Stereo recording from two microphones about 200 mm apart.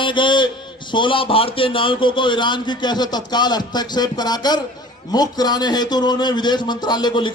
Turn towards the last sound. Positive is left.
turn(degrees=20)  # may be behind; listen again after turning